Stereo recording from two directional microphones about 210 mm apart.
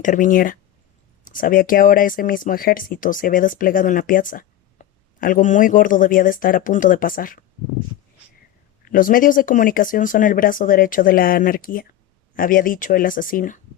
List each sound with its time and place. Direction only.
0.0 s speech: 40° left (ahead or behind)
8.8 s speech: 40° left (ahead or behind)